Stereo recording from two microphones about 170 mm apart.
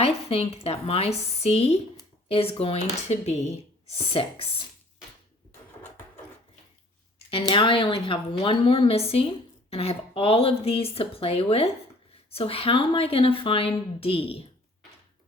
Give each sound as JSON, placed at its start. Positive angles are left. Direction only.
{"t": 0.0, "sound": "a woman's voice", "side_deg": 35}
{"t": 7.3, "sound": "a woman's voice", "side_deg": 30}